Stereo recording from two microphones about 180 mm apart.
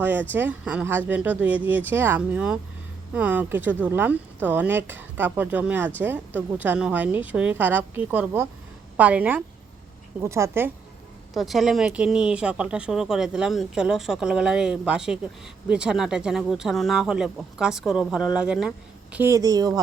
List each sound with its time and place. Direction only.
0.0 s speech: 10° right (ahead or behind)
11.3 s speech: centre (ahead or behind)
19.1 s speech: 15° right (ahead or behind)